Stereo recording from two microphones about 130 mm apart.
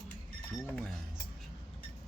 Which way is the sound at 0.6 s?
10° left (ahead or behind).